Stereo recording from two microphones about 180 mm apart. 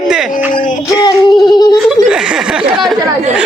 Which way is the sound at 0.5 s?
45° left (ahead or behind).